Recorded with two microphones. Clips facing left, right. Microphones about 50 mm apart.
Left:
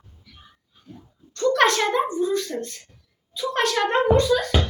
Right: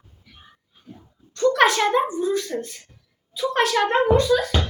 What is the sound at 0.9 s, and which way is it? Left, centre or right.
A woman's voice, centre.